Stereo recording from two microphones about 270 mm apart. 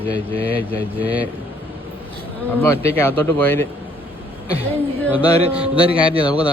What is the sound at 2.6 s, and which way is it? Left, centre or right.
Speech, centre.